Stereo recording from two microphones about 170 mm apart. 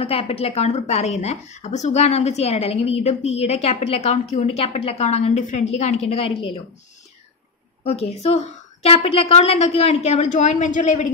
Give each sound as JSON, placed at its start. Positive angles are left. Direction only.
{"t": 0.0, "sound": "a woman's voice", "side_deg": 35}
{"t": 7.8, "sound": "a woman's voice", "side_deg": 40}